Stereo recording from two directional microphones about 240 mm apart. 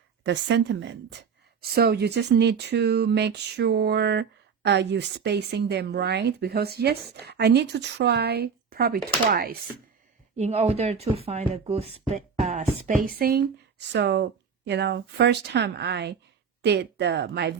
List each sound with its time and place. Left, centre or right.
0.2 s speech: right
10.3 s speech: right